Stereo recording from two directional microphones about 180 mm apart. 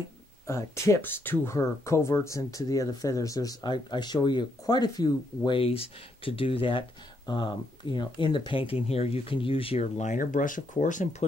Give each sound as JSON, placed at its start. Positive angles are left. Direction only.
{"t": 0.5, "sound": "speech", "side_deg": 15}